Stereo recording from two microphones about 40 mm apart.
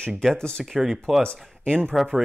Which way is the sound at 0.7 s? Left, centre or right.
Centre.